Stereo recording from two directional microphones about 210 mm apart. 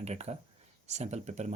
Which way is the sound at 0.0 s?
30° right (ahead or behind).